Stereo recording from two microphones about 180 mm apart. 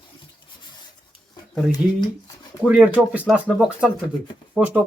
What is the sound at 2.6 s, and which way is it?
Speech, 10° right (ahead or behind).